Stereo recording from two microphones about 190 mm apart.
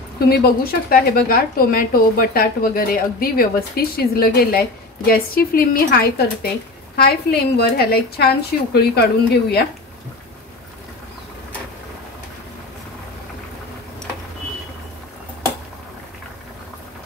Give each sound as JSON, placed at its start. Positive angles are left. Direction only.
{"t": 0.3, "sound": "a woman's voice", "side_deg": 50}